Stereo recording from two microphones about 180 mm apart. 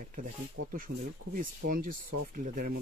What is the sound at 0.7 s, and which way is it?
Speech, 50° right (ahead or behind).